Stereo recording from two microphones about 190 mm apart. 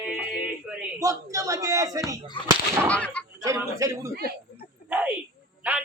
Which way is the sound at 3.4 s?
15° right (ahead or behind).